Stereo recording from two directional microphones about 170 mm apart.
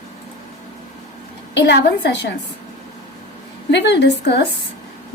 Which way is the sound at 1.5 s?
90° left.